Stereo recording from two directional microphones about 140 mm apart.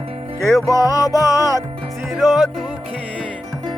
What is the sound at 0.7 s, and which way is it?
Music, 20° right (ahead or behind).